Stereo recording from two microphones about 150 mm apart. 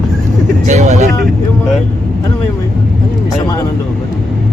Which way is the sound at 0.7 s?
50° right (ahead or behind).